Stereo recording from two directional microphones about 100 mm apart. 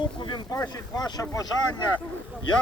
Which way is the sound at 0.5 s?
40° left (ahead or behind).